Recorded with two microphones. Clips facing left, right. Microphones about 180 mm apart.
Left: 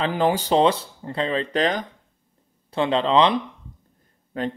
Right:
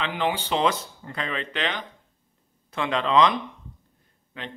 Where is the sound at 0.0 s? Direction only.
40° left (ahead or behind).